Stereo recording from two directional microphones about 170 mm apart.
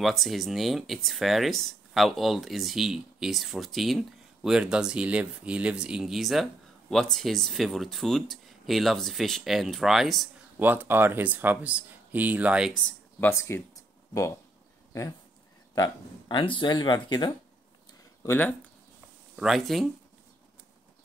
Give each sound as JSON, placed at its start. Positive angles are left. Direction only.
{"t": 0.0, "sound": "speech", "side_deg": 0}
{"t": 10.6, "sound": "speech", "side_deg": -10}
{"t": 13.2, "sound": "speech", "side_deg": 15}
{"t": 14.9, "sound": "speech", "side_deg": 20}
{"t": 18.2, "sound": "speech", "side_deg": 15}
{"t": 19.3, "sound": "speech", "side_deg": 0}